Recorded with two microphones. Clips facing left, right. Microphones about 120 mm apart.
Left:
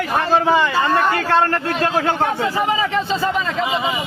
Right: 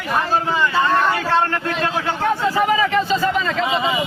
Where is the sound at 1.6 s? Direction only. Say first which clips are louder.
Left 3 dB; 40° left (ahead or behind).